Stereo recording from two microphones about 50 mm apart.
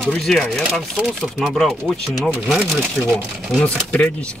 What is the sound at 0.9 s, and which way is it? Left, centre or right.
Speech, centre.